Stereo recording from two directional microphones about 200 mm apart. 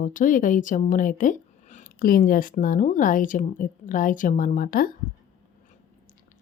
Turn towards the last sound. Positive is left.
turn(degrees=45)  # may be behind; listen again after turning